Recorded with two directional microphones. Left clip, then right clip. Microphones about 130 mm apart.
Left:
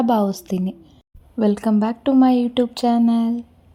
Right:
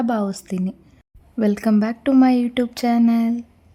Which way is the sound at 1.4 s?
15° right (ahead or behind).